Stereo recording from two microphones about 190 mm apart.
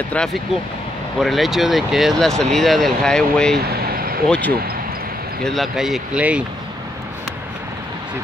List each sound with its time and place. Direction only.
0.1 s speech: 5° left (ahead or behind)
3.6 s a sound: 50° right (ahead or behind)
4.3 s speech: 10° left (ahead or behind)